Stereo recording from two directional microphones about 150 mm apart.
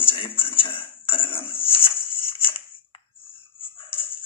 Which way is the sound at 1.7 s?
35° left (ahead or behind).